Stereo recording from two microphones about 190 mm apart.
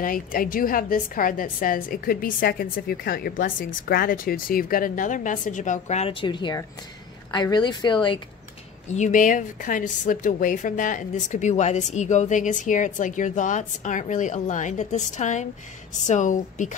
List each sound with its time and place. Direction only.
0.0 s a woman's voice: 50° left (ahead or behind); by 8.2 s 25° left (ahead or behind)
8.8 s a woman's voice: 40° left (ahead or behind)